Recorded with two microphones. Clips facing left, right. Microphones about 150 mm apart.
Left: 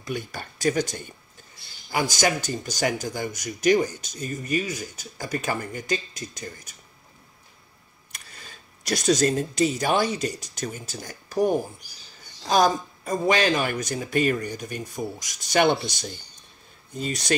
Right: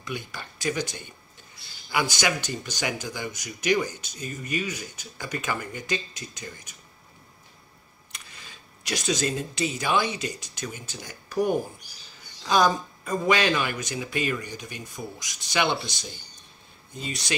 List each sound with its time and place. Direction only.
0.0 s speech: 45° left (ahead or behind)
8.1 s speech: 45° left (ahead or behind)